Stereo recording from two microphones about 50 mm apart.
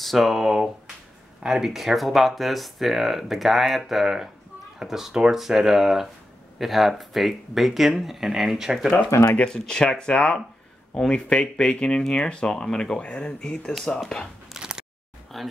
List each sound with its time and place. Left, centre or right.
0.0 s speech: centre
9.4 s speech: centre
14.5 s a sound: centre
15.3 s speech: centre